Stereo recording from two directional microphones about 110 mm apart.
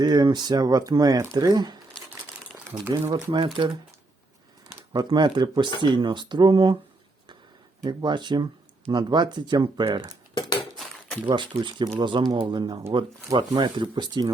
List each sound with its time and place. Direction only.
0.0 s speech: 40° right (ahead or behind)
2.5 s crumpling: 10° right (ahead or behind)
2.9 s speech: 30° right (ahead or behind)
4.9 s speech: 40° right (ahead or behind)
7.9 s speech: 45° right (ahead or behind)
11.6 s speech: 45° right (ahead or behind)